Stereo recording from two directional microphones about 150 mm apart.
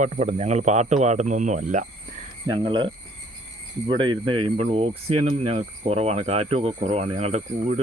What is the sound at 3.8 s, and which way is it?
Speech, 35° right (ahead or behind).